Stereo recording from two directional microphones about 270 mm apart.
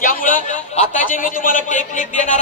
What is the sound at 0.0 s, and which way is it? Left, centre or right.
A man's voice, left.